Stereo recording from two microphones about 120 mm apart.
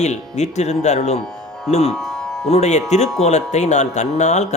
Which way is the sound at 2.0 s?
Centre (ahead or behind).